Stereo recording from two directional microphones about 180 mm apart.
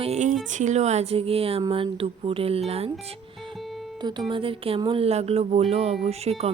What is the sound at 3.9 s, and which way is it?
Speech, 25° right (ahead or behind).